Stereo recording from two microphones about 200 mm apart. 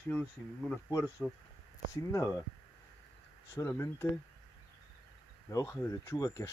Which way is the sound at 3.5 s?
15° left (ahead or behind).